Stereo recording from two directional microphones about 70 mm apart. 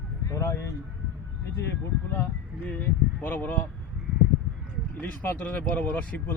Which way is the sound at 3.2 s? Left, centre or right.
Left.